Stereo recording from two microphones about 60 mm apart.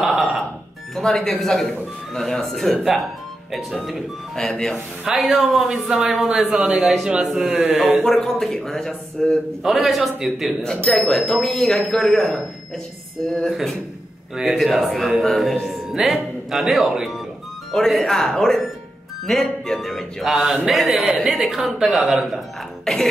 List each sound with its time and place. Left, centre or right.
0.0 s music: centre
0.9 s a man's voice: centre
4.4 s speech: centre
5.0 s a man's voice: centre
7.4 s a man's voice: right
8.0 s speech: centre
9.6 s a man's voice: centre
13.5 s a man's voice: centre
22.9 s speech: centre